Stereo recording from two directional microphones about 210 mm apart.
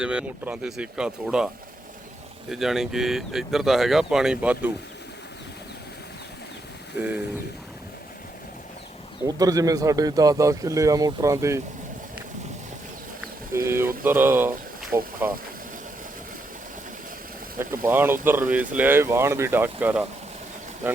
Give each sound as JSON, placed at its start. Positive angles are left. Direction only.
{"t": 0.0, "sound": "speech", "side_deg": -5}
{"t": 2.5, "sound": "speech", "side_deg": 0}
{"t": 9.2, "sound": "speech", "side_deg": -15}
{"t": 13.2, "sound": "speech", "side_deg": -10}
{"t": 17.6, "sound": "speech", "side_deg": -10}